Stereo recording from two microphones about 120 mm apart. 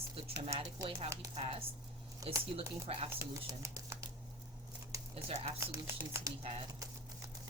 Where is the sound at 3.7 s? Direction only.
25° right (ahead or behind).